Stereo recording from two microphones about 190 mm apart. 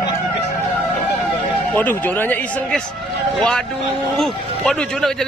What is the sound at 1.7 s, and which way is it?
Speech, 10° left (ahead or behind).